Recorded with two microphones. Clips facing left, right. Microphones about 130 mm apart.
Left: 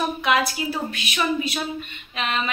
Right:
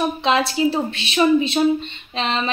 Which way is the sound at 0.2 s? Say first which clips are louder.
Right 6 dB; 25° right (ahead or behind).